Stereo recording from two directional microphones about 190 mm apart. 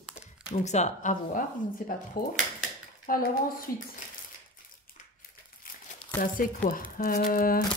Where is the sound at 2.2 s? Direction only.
50° left (ahead or behind).